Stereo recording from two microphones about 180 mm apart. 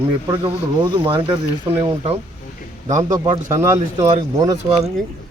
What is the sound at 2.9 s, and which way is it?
A man's voice, 20° right (ahead or behind).